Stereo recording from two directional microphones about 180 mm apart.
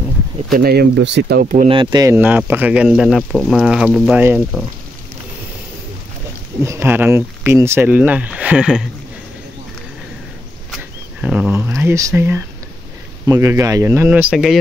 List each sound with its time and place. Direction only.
0.5 s speech: 55° right (ahead or behind)
1.7 s speech: 25° right (ahead or behind)
2.1 s speech: 10° right (ahead or behind)
6.6 s speech: 15° right (ahead or behind)
10.7 s speech: 5° right (ahead or behind)